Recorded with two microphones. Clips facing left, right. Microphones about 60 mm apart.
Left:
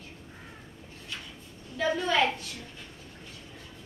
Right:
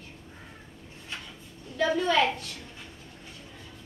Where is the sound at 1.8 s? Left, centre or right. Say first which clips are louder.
Right 2 dB; centre.